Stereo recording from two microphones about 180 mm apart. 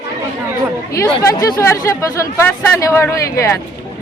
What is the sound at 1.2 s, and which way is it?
Speech, 20° left (ahead or behind).